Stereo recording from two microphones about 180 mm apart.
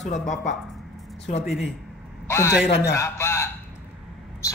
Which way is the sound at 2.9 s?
15° left (ahead or behind).